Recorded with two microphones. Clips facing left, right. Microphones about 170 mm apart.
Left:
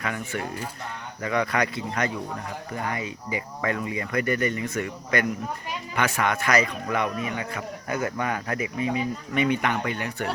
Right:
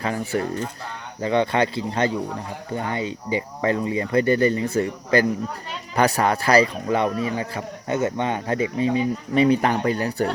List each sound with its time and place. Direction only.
0.0 s a man's voice: 35° right (ahead or behind)